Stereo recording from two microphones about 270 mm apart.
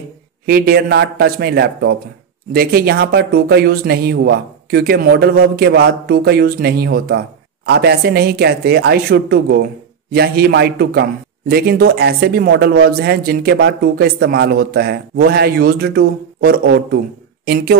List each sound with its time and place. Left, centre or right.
0.5 s speech: right